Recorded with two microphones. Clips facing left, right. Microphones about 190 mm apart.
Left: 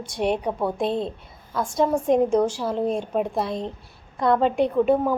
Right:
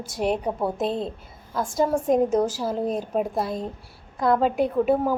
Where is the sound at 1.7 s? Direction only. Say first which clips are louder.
Left 1 dB; 5° right (ahead or behind).